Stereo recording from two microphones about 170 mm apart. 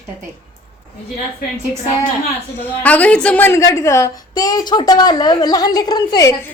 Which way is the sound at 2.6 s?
10° left (ahead or behind).